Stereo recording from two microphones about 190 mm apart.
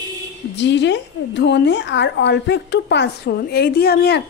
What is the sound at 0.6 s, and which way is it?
A woman's voice, 65° left (ahead or behind).